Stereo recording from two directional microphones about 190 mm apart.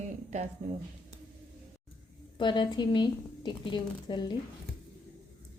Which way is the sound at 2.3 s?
25° left (ahead or behind).